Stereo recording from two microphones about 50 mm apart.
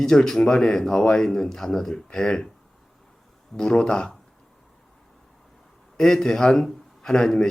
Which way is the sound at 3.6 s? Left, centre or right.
Centre.